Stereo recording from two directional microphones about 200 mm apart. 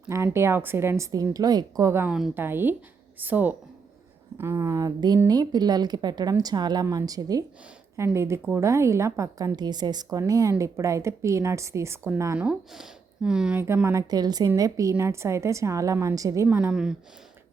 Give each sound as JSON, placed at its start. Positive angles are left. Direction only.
{"t": 0.1, "sound": "a woman's voice", "side_deg": -15}